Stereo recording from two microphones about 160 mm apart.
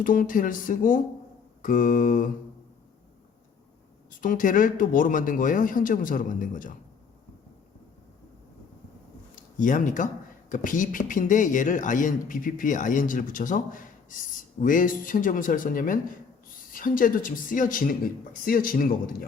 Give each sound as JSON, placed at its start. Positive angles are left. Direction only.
{"t": 0.0, "sound": "a man's voice", "side_deg": 60}
{"t": 4.2, "sound": "a man's voice", "side_deg": 55}
{"t": 9.3, "sound": "a sound", "side_deg": 55}
{"t": 10.5, "sound": "a man's voice", "side_deg": 55}